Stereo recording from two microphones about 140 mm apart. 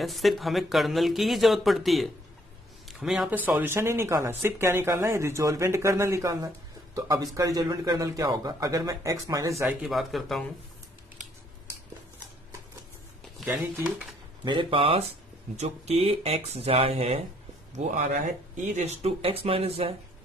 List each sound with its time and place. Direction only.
0.0 s speech: centre (ahead or behind); by 9.7 s 20° right (ahead or behind)
9.8 s speech: centre (ahead or behind)
13.5 s speech: 10° right (ahead or behind)
14.4 s speech: 35° right (ahead or behind)